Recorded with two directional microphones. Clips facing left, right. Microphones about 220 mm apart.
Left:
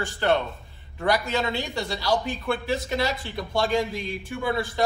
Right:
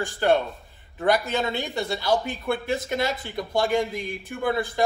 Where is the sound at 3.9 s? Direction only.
50° right (ahead or behind).